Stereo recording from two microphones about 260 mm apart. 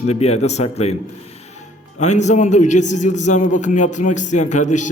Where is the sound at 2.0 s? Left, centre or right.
Left.